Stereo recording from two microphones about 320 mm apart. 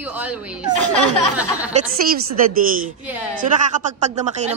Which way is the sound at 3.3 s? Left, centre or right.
Right.